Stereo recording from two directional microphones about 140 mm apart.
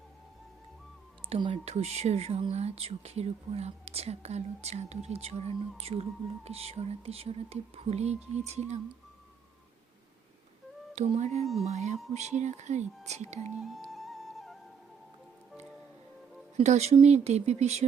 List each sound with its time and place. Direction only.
1.3 s speech: 40° right (ahead or behind)
10.9 s speech: 50° right (ahead or behind)
13.6 s music: centre (ahead or behind)
16.6 s speech: 50° right (ahead or behind)